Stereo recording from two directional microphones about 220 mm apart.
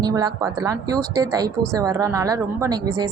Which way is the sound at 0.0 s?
20° right (ahead or behind).